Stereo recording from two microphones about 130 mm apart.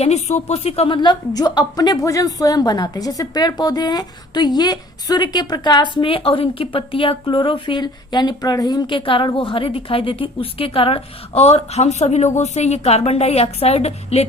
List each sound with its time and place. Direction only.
0.0 s speech: 60° left (ahead or behind)
0.9 s a woman's voice: 35° left (ahead or behind); by 14.3 s 55° left (ahead or behind)